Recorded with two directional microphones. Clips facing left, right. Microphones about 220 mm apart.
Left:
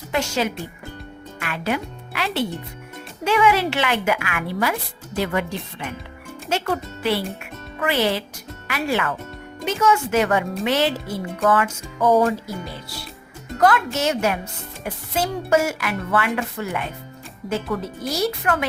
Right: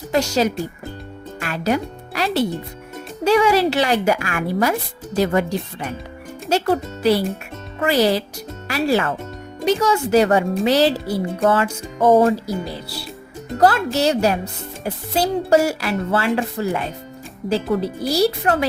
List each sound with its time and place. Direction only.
0.1 s speech: 40° right (ahead or behind)